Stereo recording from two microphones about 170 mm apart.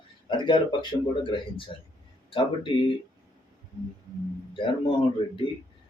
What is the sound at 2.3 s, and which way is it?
Speech, 30° left (ahead or behind).